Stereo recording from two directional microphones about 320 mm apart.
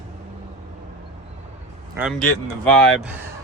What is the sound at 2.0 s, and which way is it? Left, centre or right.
Speech, centre.